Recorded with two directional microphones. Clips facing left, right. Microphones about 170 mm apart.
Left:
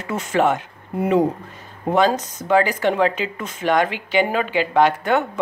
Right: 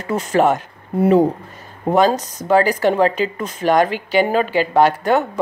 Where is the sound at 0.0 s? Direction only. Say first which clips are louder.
Right 3 dB; 35° right (ahead or behind).